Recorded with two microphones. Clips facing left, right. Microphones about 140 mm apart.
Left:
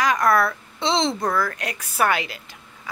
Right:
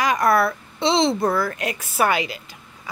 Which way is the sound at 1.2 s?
25° right (ahead or behind).